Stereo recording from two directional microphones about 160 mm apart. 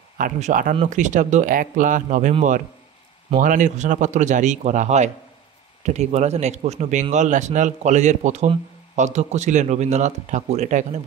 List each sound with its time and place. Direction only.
0.2 s speech: 55° right (ahead or behind)
3.3 s speech: 55° right (ahead or behind)